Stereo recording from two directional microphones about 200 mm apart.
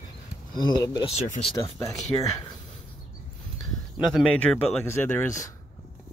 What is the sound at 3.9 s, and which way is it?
Speech, centre (ahead or behind).